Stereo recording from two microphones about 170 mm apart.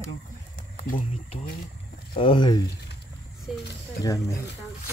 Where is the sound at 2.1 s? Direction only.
30° left (ahead or behind).